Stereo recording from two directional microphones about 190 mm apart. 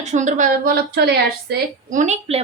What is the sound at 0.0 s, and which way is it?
A woman's voice, 40° right (ahead or behind).